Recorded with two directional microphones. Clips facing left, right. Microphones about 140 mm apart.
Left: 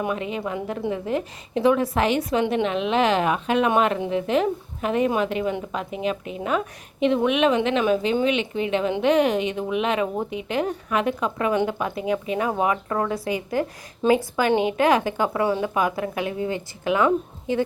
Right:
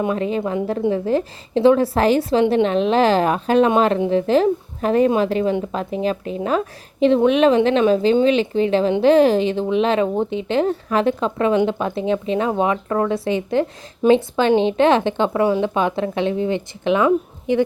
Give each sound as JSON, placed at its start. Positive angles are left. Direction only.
{"t": 0.0, "sound": "a woman's voice", "side_deg": -30}